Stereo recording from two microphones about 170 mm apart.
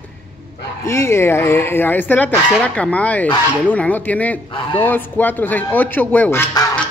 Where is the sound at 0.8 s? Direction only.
15° left (ahead or behind).